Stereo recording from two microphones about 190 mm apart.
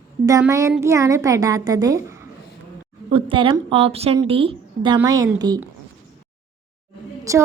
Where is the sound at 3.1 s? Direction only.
30° right (ahead or behind).